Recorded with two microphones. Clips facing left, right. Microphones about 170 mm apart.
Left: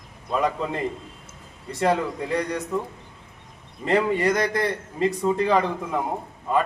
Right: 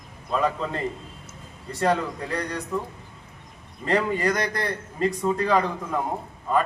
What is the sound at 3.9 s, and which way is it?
A man's voice, 20° left (ahead or behind).